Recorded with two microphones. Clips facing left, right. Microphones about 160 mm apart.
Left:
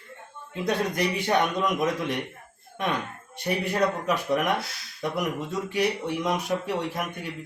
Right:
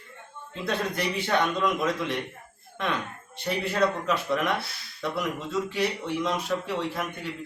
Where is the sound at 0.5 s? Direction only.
15° left (ahead or behind).